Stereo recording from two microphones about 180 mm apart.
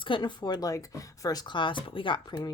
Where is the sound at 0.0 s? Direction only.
25° left (ahead or behind).